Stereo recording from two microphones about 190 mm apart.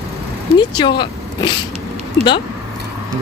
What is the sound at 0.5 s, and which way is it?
Speech, 25° left (ahead or behind).